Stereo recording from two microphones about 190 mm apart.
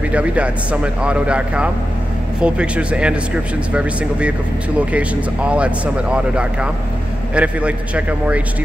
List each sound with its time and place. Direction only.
0.1 s speech: 5° right (ahead or behind)